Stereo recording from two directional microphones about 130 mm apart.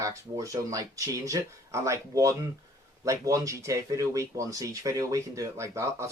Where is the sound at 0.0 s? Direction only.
25° right (ahead or behind).